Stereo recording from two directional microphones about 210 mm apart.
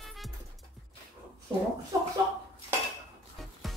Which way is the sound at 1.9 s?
15° right (ahead or behind).